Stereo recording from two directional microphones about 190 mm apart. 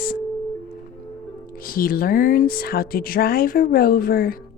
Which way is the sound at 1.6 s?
50° left (ahead or behind).